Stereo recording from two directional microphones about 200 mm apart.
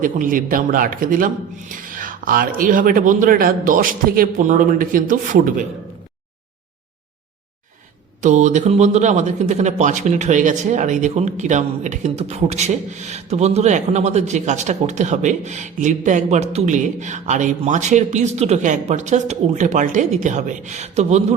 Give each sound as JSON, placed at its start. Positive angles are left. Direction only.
{"t": 0.0, "sound": "a man's voice", "side_deg": -40}
{"t": 8.2, "sound": "speech", "side_deg": -35}